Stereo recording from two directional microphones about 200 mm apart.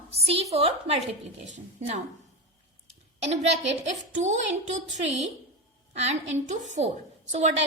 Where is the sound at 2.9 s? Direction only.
35° right (ahead or behind).